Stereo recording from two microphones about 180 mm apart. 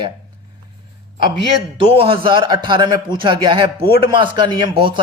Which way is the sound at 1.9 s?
30° right (ahead or behind).